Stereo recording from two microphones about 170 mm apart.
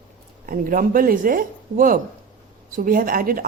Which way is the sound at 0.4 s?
55° right (ahead or behind).